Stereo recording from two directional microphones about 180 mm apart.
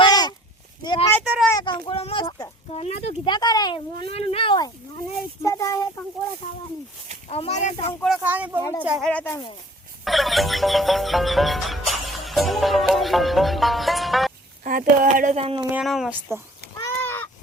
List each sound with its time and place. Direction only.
0.0 s a sound: 20° left (ahead or behind)
1.2 s speech: 5° right (ahead or behind)
1.5 s a child's voice: 25° left (ahead or behind)
5.4 s child singing: 15° left (ahead or behind)
6.4 s speech: 45° left (ahead or behind)
7.3 s speech: 35° left (ahead or behind)
8.0 s speech: 5° right (ahead or behind)
9.0 s child singing: 10° left (ahead or behind)
10.0 s speech: centre (ahead or behind)
14.6 s speech: 50° right (ahead or behind); by 15.6 s 35° right (ahead or behind)
15.7 s speech: centre (ahead or behind)
16.7 s a sound: 10° left (ahead or behind)